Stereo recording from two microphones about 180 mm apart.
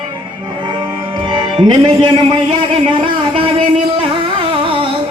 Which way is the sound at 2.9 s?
30° right (ahead or behind).